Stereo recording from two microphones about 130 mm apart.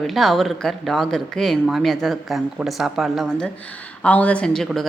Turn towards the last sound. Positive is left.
turn(degrees=5)  # may be behind; listen again after turning